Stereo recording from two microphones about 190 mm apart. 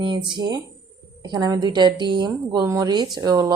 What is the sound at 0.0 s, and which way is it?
A woman's voice, 25° right (ahead or behind).